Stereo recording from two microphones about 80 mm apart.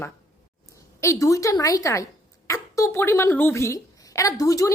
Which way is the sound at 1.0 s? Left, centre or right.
Left.